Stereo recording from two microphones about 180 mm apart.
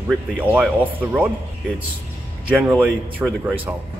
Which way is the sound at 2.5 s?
5° right (ahead or behind).